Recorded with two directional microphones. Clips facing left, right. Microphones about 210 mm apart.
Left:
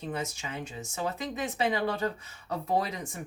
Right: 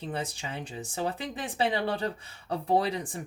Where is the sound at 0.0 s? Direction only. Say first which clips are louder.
Even; 30° right (ahead or behind).